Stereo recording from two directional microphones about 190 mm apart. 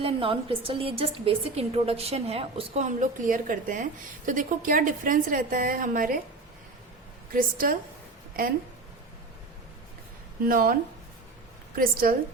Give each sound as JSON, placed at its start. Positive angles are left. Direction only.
{"t": 0.0, "sound": "a woman's voice", "side_deg": -30}
{"t": 7.3, "sound": "a woman's voice", "side_deg": -45}
{"t": 10.4, "sound": "a woman's voice", "side_deg": -50}
{"t": 11.8, "sound": "a woman's voice", "side_deg": -50}